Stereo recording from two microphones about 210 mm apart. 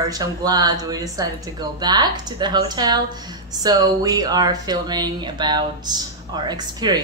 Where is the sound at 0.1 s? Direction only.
20° right (ahead or behind).